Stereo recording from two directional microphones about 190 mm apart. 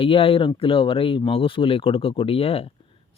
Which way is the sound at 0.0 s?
30° left (ahead or behind).